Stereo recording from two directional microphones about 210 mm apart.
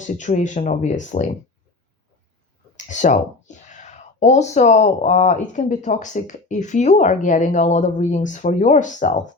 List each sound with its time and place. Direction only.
0.0 s speech: 35° left (ahead or behind)
2.7 s speech: 35° left (ahead or behind)